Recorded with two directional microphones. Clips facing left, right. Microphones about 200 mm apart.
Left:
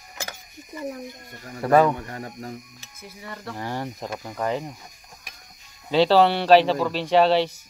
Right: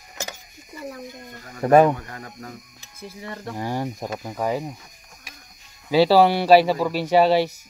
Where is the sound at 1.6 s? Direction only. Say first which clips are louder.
Right 3 dB; 20° right (ahead or behind).